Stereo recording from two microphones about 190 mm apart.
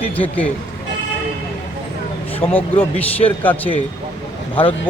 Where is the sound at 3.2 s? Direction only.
10° left (ahead or behind).